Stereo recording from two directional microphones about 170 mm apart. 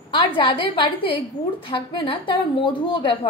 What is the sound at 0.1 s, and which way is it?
A woman's voice, 30° left (ahead or behind).